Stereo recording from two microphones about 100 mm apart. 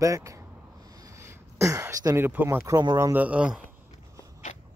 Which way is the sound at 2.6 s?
35° right (ahead or behind).